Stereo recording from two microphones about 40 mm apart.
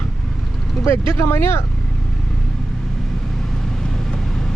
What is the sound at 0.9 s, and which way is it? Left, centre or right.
Speech, left.